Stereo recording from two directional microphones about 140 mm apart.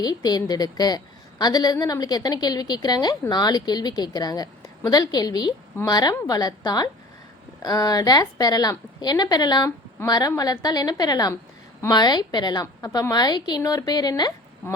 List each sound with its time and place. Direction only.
0.0 s a woman's voice: 30° left (ahead or behind)